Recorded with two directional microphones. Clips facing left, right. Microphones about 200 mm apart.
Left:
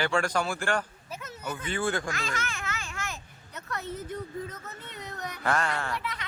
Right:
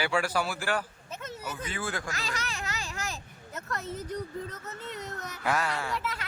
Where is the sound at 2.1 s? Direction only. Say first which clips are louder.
Left 2 dB; 35° right (ahead or behind).